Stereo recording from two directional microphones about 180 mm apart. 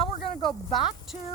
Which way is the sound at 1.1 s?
Centre (ahead or behind).